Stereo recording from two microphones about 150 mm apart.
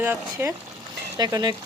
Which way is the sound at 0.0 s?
15° right (ahead or behind).